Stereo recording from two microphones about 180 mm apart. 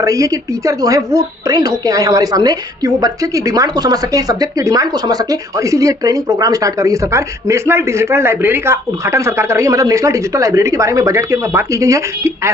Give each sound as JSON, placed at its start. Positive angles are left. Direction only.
{"t": 0.0, "sound": "a woman's voice", "side_deg": -20}